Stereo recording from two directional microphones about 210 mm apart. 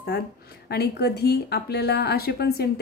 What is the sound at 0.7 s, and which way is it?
Speech, 50° left (ahead or behind).